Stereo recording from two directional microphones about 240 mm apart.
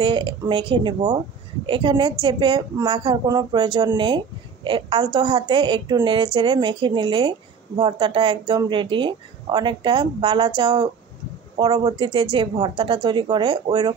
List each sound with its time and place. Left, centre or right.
0.0 s a woman's voice: right